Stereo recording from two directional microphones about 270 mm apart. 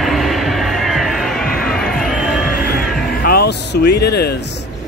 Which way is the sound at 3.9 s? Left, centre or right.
Left.